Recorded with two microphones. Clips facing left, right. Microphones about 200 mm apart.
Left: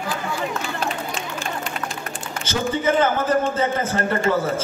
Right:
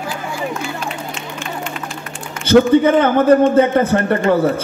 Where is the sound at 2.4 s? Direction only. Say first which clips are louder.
Right 12 dB; 60° right (ahead or behind).